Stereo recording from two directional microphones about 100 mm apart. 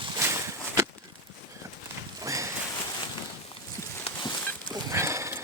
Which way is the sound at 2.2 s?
30° right (ahead or behind).